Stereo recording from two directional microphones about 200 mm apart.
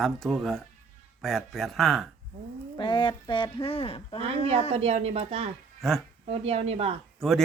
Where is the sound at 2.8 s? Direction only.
25° left (ahead or behind).